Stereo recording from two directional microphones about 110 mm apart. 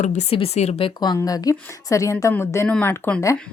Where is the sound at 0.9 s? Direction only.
35° left (ahead or behind).